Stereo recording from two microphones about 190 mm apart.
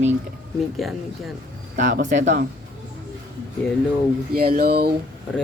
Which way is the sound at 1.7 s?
40° right (ahead or behind).